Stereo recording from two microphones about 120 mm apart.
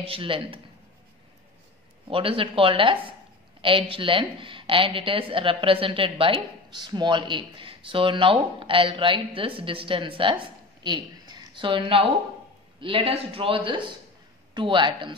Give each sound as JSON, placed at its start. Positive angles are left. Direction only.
{"t": 0.0, "sound": "a woman's voice", "side_deg": -50}
{"t": 2.0, "sound": "a woman's voice", "side_deg": -50}